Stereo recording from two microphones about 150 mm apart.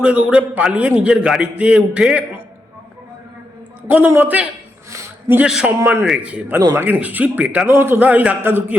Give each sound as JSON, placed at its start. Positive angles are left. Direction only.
{"t": 0.0, "sound": "a man's voice", "side_deg": -10}
{"t": 3.8, "sound": "a man's voice", "side_deg": -10}
{"t": 4.9, "sound": "a sound", "side_deg": -20}
{"t": 5.4, "sound": "a man's voice", "side_deg": -5}